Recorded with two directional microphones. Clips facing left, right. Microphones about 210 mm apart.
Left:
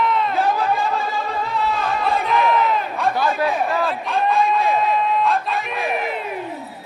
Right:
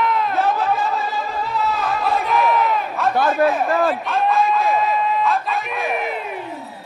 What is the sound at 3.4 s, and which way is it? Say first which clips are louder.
Speech: right 6 dB; 50° right (ahead or behind).